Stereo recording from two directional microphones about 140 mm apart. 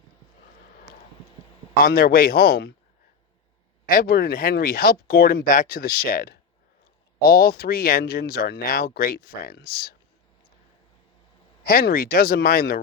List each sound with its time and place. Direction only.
1.8 s speech: 90° left
3.8 s speech: 90° left
11.6 s speech: 90° left